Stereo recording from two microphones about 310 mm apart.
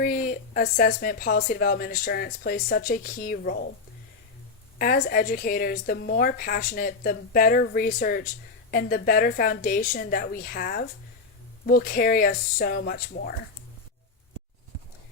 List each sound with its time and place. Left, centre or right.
0.0 s a woman's voice: left
4.8 s a woman's voice: left